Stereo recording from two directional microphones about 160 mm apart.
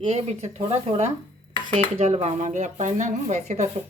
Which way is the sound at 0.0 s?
40° right (ahead or behind).